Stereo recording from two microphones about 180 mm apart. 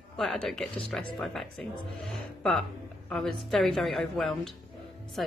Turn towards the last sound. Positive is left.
turn(degrees=0)  # may be behind; listen again after turning